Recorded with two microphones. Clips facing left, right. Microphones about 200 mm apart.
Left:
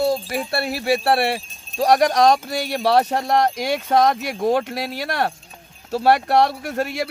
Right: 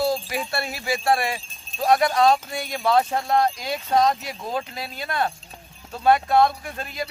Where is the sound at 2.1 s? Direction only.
75° left (ahead or behind).